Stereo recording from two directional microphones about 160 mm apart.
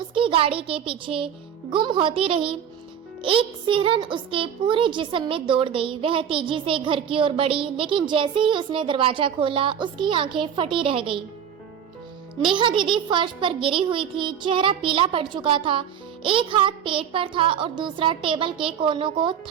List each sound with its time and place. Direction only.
0.1 s a child's voice: 35° right (ahead or behind)
12.5 s a woman's voice: 30° right (ahead or behind)